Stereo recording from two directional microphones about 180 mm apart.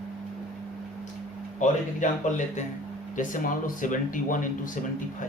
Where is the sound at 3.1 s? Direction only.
45° left (ahead or behind).